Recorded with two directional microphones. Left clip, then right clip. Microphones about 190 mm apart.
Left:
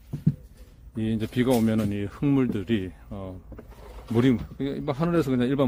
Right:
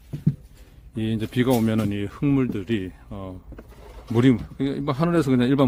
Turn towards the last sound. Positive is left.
turn(degrees=-20)  # may be behind; listen again after turning